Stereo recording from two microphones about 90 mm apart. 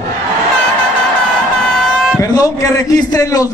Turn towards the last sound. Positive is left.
turn(degrees=40)  # may be behind; listen again after turning